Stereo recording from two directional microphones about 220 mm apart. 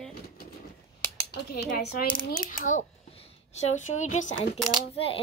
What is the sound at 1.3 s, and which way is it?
Speech, 50° left (ahead or behind).